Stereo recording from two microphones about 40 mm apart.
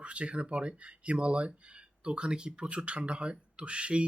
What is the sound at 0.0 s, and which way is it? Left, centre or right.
Speech, right.